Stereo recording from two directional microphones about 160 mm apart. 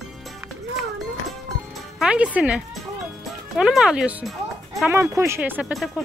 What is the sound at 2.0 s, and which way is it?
Speech, 5° right (ahead or behind).